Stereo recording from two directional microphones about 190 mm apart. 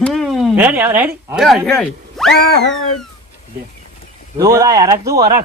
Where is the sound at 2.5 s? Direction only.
70° left (ahead or behind).